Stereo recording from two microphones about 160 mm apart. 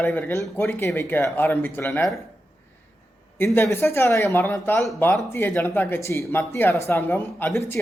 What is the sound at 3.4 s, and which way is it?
Speech, 15° left (ahead or behind).